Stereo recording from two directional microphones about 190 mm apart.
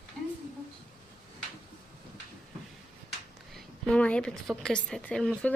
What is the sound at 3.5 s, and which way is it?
A woman's voice, 5° left (ahead or behind).